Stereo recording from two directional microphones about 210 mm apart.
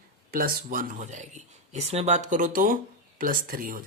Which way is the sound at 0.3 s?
45° right (ahead or behind).